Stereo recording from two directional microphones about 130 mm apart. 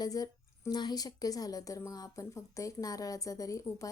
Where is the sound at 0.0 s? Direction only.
25° left (ahead or behind).